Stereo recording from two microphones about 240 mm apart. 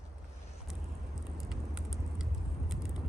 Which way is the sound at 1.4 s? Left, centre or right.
Centre.